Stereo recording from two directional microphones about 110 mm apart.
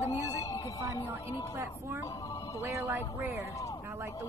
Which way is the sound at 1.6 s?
25° right (ahead or behind).